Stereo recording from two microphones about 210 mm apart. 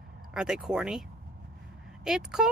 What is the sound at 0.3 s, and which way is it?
Speech, 5° right (ahead or behind).